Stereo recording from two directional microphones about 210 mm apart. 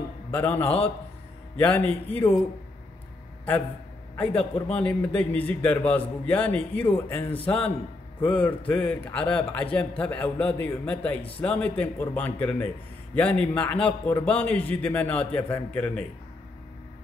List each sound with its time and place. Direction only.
0.3 s a man's voice: 10° left (ahead or behind)
0.7 s a man's voice: 25° left (ahead or behind)
1.6 s a man's voice: 10° left (ahead or behind)
4.2 s a man's voice: 5° left (ahead or behind)